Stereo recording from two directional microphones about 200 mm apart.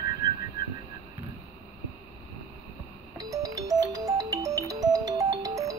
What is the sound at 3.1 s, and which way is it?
Music, 15° right (ahead or behind).